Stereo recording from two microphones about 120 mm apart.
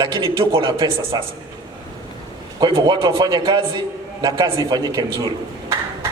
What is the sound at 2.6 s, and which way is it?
Speech, 35° right (ahead or behind).